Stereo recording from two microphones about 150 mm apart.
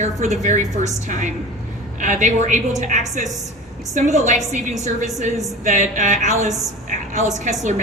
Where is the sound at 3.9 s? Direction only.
55° right (ahead or behind).